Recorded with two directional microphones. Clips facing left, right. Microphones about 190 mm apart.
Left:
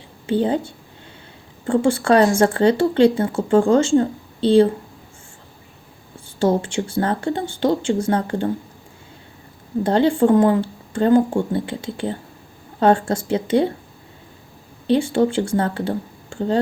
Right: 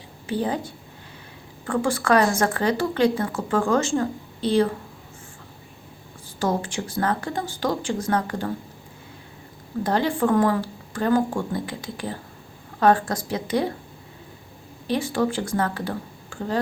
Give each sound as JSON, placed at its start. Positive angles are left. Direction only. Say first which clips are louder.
{"t": 0.3, "sound": "speech", "louder": "left 6 dB", "side_deg": 25}
{"t": 6.4, "sound": "speech", "louder": "left 6 dB", "side_deg": 25}
{"t": 9.8, "sound": "speech", "louder": "left 6 dB", "side_deg": 30}
{"t": 14.8, "sound": "speech", "louder": "left 6 dB", "side_deg": 30}